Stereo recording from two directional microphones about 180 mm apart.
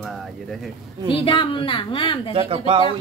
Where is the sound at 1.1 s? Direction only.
30° left (ahead or behind).